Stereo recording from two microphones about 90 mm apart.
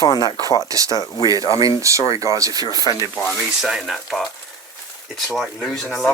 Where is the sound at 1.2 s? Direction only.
45° right (ahead or behind).